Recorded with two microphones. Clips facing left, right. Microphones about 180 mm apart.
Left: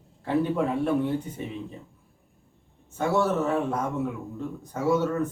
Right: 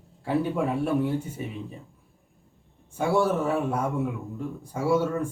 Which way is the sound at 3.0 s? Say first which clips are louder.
Right 1 dB; 10° right (ahead or behind).